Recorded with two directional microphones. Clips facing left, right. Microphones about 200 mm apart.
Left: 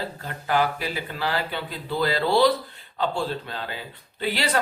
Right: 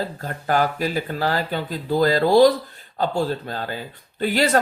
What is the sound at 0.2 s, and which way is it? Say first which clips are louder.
Speech: right 2 dB; 45° right (ahead or behind).